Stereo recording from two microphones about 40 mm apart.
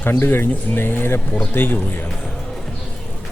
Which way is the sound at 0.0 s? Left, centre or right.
Left.